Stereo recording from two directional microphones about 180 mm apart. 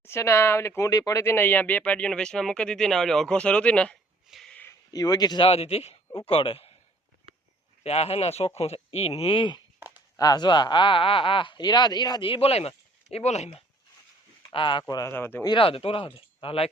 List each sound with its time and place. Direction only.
0.0 s speech: 15° left (ahead or behind); by 6.7 s 30° left (ahead or behind)
7.9 s speech: 35° left (ahead or behind)
14.5 s speech: 25° left (ahead or behind)
15.1 s speech: 10° left (ahead or behind)
15.4 s speech: 30° left (ahead or behind)